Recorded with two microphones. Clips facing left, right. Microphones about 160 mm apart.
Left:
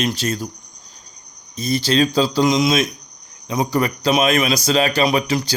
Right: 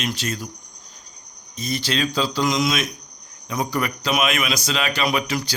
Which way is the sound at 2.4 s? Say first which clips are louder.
Left 5 dB; 25° left (ahead or behind).